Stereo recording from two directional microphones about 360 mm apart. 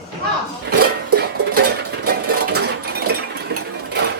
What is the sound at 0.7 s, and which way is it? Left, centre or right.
Music, right.